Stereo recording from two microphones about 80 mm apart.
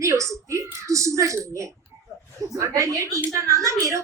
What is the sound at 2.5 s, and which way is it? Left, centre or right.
A woman's voice, right.